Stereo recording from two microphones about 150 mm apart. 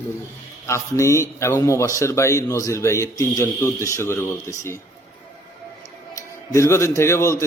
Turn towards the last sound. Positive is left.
turn(degrees=20)  # may be behind; listen again after turning